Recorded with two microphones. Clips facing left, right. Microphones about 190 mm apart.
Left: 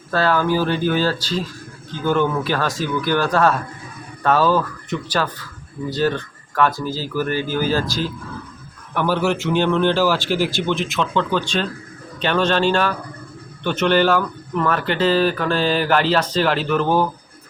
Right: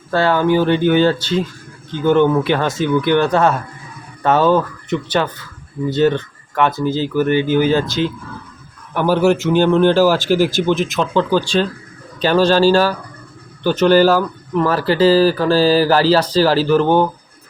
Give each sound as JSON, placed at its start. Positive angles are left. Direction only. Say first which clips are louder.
{"t": 0.1, "sound": "speech", "louder": "right 4 dB", "side_deg": -25}
{"t": 9.0, "sound": "a man's voice", "louder": "right 5 dB", "side_deg": -40}